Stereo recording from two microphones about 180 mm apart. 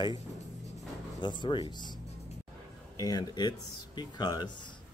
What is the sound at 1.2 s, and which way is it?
Speech, 25° left (ahead or behind).